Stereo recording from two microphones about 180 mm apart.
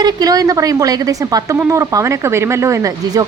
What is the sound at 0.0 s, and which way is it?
A woman's voice, 20° right (ahead or behind).